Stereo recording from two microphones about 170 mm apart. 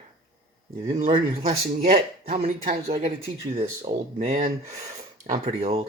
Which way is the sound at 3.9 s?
25° right (ahead or behind).